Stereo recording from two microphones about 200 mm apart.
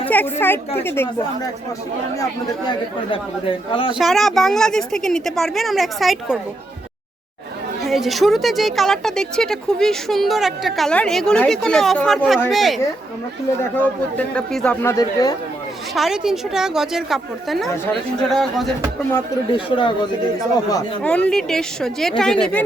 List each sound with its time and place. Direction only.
0.1 s a man's voice: 10° left (ahead or behind)
3.7 s speech: 25° left (ahead or behind)
3.9 s speech: centre (ahead or behind)
7.9 s a man's voice: centre (ahead or behind); by 15.4 s 20° left (ahead or behind)
16.0 s speech: centre (ahead or behind)
19.5 s speech: 25° left (ahead or behind)
21.0 s speech: 5° left (ahead or behind)